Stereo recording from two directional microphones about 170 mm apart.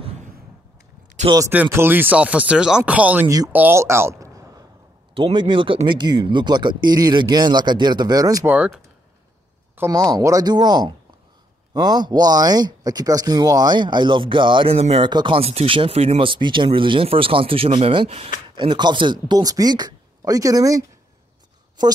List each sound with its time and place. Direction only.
1.5 s speech: 10° right (ahead or behind)
5.1 s speech: 30° right (ahead or behind)
8.5 s speech: 5° right (ahead or behind)
9.8 s speech: 20° right (ahead or behind)